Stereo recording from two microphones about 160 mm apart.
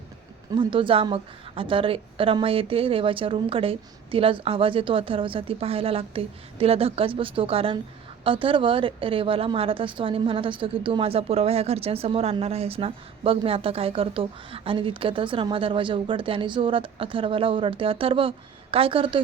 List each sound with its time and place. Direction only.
0.5 s a woman's voice: 30° right (ahead or behind)